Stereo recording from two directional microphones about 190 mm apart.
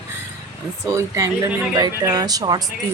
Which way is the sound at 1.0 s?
15° right (ahead or behind).